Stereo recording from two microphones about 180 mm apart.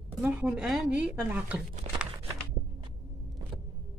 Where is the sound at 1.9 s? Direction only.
40° right (ahead or behind).